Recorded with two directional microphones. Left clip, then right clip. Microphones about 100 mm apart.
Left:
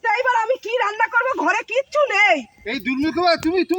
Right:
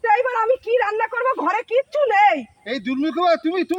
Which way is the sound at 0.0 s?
15° right (ahead or behind).